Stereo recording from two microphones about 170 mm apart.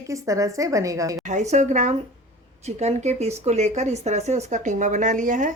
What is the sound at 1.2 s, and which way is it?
Speech, 45° right (ahead or behind).